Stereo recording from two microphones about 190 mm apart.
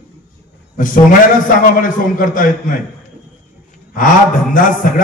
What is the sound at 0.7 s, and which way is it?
A man's voice, 45° left (ahead or behind).